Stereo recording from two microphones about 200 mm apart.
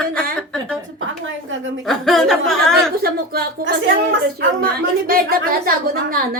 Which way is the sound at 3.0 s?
50° right (ahead or behind).